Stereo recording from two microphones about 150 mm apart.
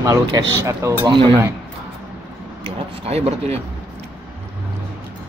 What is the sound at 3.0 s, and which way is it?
Speech, 45° right (ahead or behind).